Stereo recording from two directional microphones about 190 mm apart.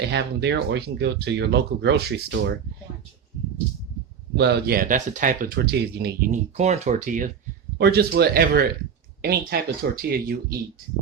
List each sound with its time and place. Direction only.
0.0 s speech: 60° right (ahead or behind)
4.4 s speech: 60° right (ahead or behind); by 7.3 s 45° right (ahead or behind)
7.8 s speech: 60° right (ahead or behind)